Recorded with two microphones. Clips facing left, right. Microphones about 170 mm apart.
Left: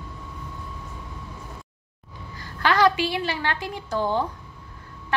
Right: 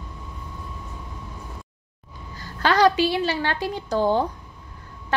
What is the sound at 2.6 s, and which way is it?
A woman's voice, 30° right (ahead or behind).